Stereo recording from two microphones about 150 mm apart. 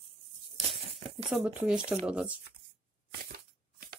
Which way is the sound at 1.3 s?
10° right (ahead or behind).